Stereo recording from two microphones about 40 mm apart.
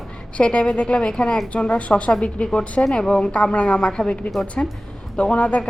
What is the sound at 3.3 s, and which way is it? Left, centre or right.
A woman's voice, left.